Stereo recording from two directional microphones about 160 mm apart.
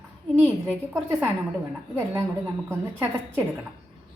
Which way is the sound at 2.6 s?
15° right (ahead or behind).